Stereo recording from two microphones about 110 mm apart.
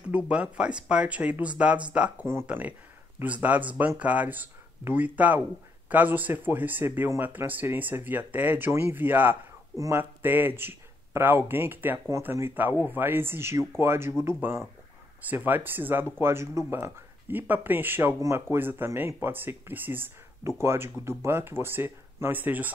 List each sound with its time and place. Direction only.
0.1 s speech: 10° right (ahead or behind)
9.8 s speech: 30° right (ahead or behind)
10.2 s speech: 20° right (ahead or behind)